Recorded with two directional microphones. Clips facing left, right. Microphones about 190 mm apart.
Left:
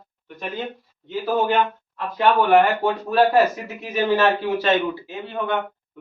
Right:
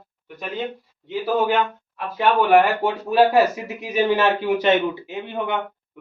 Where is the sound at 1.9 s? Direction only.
15° right (ahead or behind).